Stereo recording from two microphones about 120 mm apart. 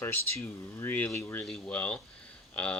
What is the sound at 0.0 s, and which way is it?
Speech, 20° left (ahead or behind).